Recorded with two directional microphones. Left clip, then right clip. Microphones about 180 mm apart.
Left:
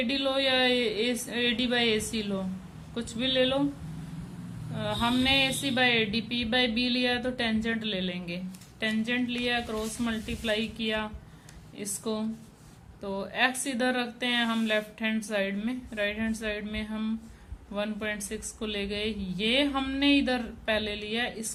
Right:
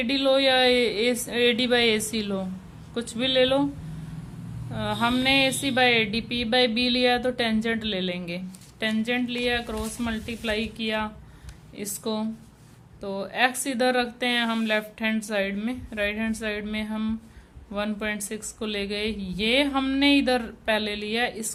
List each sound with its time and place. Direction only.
0.0 s speech: 30° right (ahead or behind)
4.7 s speech: 30° right (ahead or behind)